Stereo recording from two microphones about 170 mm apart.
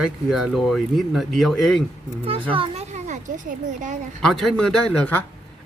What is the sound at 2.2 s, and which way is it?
Speech, 30° right (ahead or behind).